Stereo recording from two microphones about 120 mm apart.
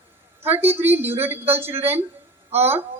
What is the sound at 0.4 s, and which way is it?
A woman's voice, 15° right (ahead or behind).